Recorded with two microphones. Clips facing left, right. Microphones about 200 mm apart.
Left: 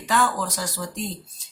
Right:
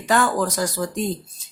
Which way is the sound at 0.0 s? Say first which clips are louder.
Right 4 dB; 55° right (ahead or behind).